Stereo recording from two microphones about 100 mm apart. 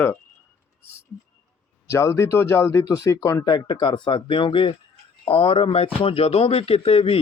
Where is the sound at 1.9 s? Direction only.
30° left (ahead or behind).